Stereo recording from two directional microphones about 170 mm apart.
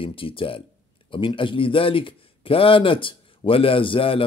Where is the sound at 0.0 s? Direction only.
30° left (ahead or behind).